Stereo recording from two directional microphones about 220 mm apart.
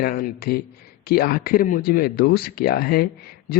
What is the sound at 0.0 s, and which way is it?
A man's voice, 40° left (ahead or behind).